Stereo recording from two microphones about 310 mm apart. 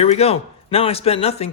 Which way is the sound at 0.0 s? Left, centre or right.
Centre.